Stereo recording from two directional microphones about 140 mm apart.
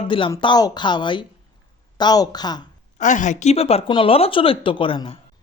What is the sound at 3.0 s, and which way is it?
Speech, 60° left (ahead or behind).